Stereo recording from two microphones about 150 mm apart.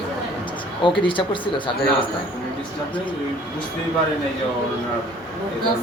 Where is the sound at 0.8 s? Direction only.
35° left (ahead or behind).